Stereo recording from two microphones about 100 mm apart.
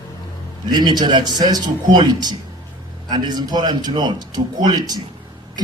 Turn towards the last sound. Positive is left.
turn(degrees=-45)  # may be behind; listen again after turning